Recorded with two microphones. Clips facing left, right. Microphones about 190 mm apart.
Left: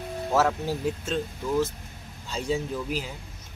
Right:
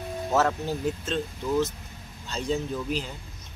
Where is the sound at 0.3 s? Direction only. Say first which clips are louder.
Left 1 dB; 10° left (ahead or behind).